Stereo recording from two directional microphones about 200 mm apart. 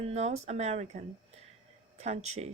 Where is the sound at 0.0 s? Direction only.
30° right (ahead or behind).